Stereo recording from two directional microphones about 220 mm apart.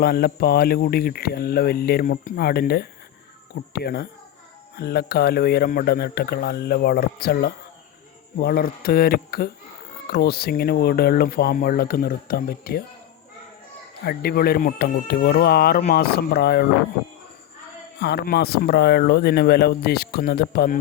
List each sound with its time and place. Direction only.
0.0 s speech: 45° left (ahead or behind)
14.0 s speech: 45° left (ahead or behind)
18.0 s speech: 45° left (ahead or behind)